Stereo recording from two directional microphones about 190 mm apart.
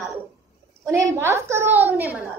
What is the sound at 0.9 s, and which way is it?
A woman's voice, 15° right (ahead or behind).